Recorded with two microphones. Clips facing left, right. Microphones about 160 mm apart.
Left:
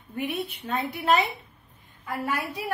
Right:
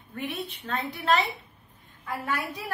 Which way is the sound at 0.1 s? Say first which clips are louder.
Left 4 dB; 10° left (ahead or behind).